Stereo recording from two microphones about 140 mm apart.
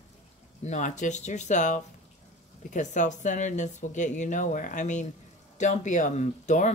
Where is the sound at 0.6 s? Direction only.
60° left (ahead or behind).